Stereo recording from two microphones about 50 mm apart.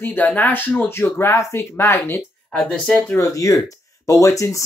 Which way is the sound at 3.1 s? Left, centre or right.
Left.